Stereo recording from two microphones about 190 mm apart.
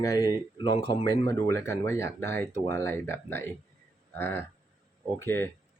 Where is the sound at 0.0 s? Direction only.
20° left (ahead or behind).